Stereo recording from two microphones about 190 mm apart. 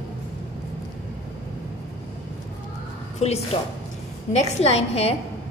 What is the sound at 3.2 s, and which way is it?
A woman's voice, 35° left (ahead or behind).